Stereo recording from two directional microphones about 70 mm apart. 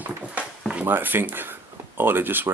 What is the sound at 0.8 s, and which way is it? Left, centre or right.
Speech, right.